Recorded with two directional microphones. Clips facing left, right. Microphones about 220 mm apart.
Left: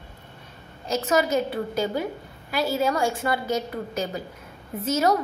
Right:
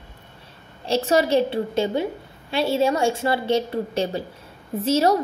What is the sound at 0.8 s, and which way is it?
A woman's voice, 30° right (ahead or behind).